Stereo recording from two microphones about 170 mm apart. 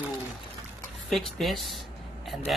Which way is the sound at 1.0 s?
Centre (ahead or behind).